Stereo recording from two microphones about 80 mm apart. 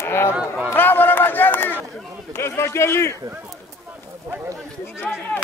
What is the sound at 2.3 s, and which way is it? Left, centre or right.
Speech, left.